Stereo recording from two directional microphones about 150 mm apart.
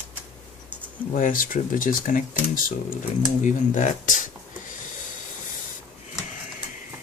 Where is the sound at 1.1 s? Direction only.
65° left (ahead or behind).